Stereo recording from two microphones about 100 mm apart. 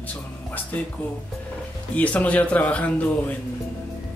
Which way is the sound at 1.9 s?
15° left (ahead or behind).